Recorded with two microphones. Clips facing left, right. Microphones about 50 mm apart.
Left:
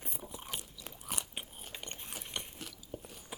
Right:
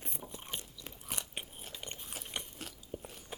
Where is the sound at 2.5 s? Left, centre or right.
Centre.